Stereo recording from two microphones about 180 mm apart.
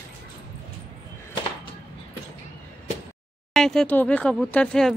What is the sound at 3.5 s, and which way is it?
A woman's voice, centre (ahead or behind).